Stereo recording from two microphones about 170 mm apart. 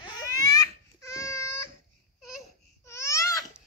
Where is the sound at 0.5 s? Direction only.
20° left (ahead or behind).